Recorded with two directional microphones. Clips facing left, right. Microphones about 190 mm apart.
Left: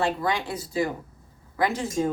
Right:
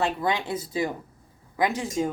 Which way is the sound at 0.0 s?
20° right (ahead or behind).